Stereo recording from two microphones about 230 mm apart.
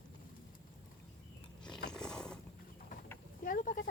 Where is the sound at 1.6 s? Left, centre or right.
Centre.